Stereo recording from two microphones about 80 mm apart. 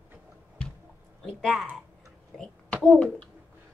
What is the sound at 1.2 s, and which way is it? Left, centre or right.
Speech, centre.